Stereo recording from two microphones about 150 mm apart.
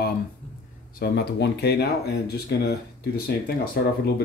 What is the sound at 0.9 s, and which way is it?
Speech, 90° left.